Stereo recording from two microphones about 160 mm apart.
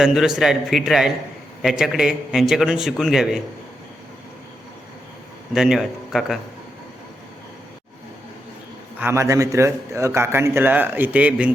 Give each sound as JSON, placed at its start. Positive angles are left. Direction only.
{"t": 0.0, "sound": "a man's voice", "side_deg": -5}
{"t": 5.5, "sound": "a man's voice", "side_deg": -5}
{"t": 9.0, "sound": "speech", "side_deg": -15}